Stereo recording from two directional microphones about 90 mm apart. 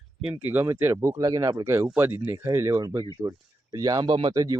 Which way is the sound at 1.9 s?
25° right (ahead or behind).